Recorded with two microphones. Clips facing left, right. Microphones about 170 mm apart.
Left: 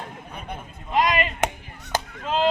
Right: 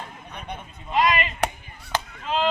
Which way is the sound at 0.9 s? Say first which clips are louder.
Even; 45° left (ahead or behind).